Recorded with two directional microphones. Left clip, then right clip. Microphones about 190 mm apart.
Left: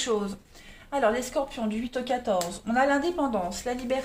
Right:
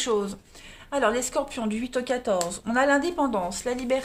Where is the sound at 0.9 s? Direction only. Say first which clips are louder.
Right 1 dB; 45° right (ahead or behind).